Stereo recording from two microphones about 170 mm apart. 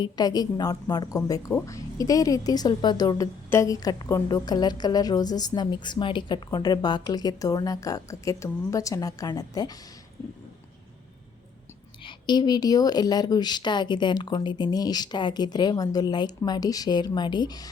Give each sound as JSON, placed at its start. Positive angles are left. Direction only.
{"t": 0.0, "sound": "speech", "side_deg": 25}
{"t": 12.0, "sound": "speech", "side_deg": 25}